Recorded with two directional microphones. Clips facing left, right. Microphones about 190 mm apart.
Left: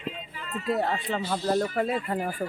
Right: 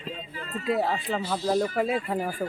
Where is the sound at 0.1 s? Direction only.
40° right (ahead or behind).